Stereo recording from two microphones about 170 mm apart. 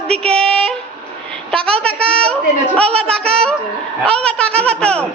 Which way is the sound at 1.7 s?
5° left (ahead or behind).